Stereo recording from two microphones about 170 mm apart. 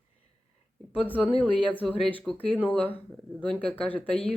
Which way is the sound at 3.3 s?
5° left (ahead or behind).